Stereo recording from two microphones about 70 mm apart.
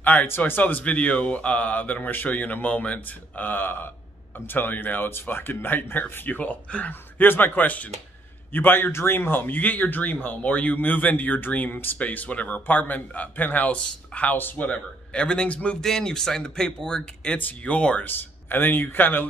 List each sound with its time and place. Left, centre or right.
0.0 s speech: left
14.3 s speech: left
14.7 s speech: centre
17.4 s speech: left
18.0 s speech: left